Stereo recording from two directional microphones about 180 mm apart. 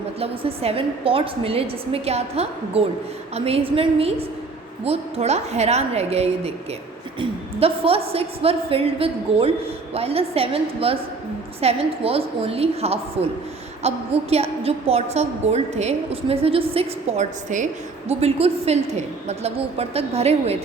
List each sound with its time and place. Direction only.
0.2 s a woman's voice: 35° right (ahead or behind)